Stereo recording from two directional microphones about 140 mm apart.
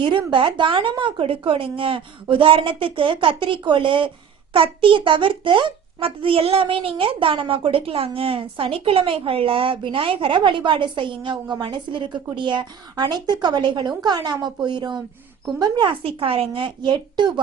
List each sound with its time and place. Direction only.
0.0 s a child's voice: 35° right (ahead or behind)